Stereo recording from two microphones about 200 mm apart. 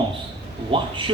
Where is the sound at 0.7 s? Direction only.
25° right (ahead or behind).